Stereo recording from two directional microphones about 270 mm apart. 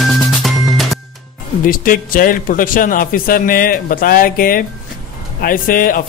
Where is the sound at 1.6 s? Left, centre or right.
Left.